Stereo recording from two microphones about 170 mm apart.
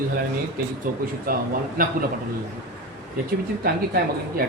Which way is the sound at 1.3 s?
55° right (ahead or behind).